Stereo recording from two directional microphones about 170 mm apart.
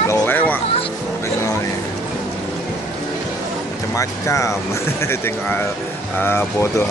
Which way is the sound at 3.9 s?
20° left (ahead or behind).